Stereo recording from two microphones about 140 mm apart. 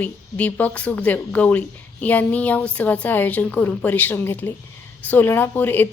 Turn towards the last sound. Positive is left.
turn(degrees=15)  # may be behind; listen again after turning